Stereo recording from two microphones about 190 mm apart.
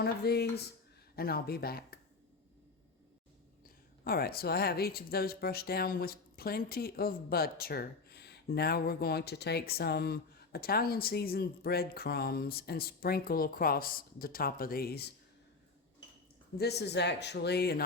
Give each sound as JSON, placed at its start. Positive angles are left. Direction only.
{"t": 0.0, "sound": "speech", "side_deg": 55}
{"t": 4.0, "sound": "speech", "side_deg": 50}
{"t": 16.6, "sound": "speech", "side_deg": 60}